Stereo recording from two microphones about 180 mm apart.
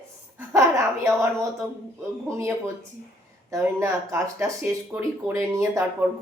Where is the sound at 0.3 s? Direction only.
15° right (ahead or behind).